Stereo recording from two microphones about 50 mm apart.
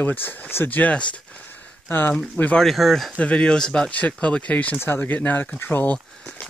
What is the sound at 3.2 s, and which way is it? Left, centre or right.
Speech, left.